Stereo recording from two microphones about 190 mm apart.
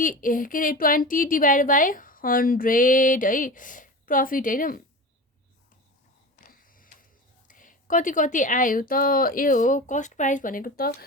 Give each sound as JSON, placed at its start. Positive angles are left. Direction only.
{"t": 0.0, "sound": "a woman's voice", "side_deg": 45}
{"t": 6.4, "sound": "printer", "side_deg": 45}
{"t": 7.4, "sound": "a woman's voice", "side_deg": 45}